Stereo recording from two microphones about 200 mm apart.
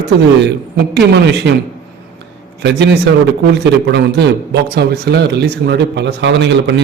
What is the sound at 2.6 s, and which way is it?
Speech, 60° right (ahead or behind).